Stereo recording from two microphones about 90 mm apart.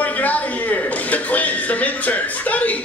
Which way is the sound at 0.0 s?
15° left (ahead or behind).